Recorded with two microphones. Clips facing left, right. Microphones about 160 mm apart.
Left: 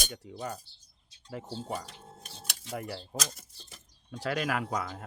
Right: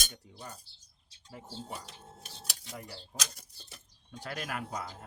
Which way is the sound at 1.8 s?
Centre (ahead or behind).